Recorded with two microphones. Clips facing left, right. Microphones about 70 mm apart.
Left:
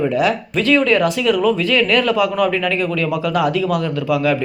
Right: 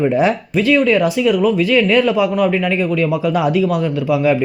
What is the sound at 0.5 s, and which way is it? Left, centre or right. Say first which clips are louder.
Speech: right 1 dB; centre.